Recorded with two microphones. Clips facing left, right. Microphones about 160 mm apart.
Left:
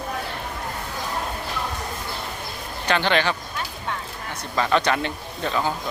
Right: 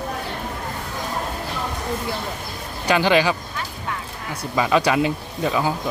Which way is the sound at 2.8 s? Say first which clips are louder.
Right 4 dB; 10° right (ahead or behind).